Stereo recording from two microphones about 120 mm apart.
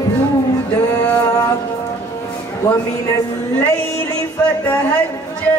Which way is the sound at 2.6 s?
30° left (ahead or behind).